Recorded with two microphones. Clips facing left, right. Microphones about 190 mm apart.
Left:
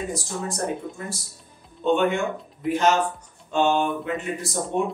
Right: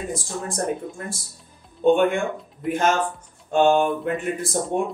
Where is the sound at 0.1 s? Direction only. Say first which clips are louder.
Right 1 dB; 50° right (ahead or behind).